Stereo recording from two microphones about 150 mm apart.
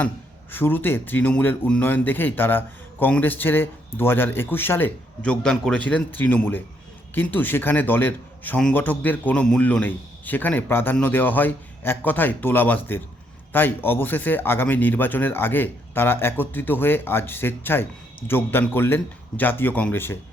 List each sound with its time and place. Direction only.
0.5 s speech: 15° left (ahead or behind)